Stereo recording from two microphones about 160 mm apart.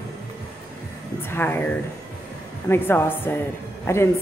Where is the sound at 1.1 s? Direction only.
15° left (ahead or behind).